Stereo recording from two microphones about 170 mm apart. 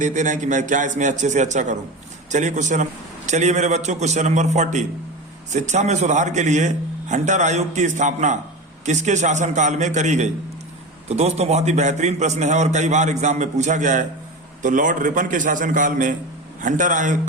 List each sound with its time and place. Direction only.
0.0 s a man's voice: 45° right (ahead or behind)